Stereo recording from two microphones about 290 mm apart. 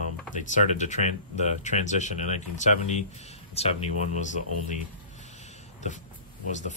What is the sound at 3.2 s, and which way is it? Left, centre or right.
Speech, left.